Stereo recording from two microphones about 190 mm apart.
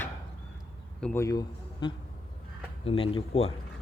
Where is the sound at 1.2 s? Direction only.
20° left (ahead or behind).